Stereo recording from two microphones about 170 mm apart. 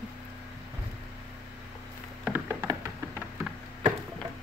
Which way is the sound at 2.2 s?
10° right (ahead or behind).